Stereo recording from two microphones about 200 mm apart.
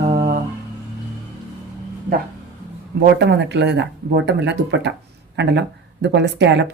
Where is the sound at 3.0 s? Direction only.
55° right (ahead or behind).